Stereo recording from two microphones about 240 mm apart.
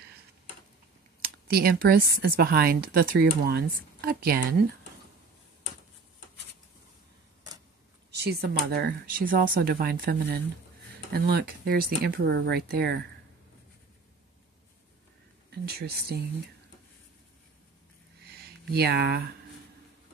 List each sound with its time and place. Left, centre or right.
1.2 s speech: right
8.1 s speech: right
15.5 s speech: right
18.7 s speech: right